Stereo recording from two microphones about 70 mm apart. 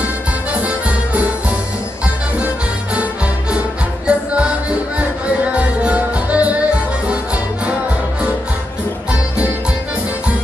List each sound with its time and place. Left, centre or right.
0.6 s music: right
2.3 s music: centre
4.1 s music: centre